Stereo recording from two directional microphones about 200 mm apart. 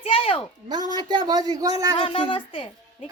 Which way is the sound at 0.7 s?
20° right (ahead or behind).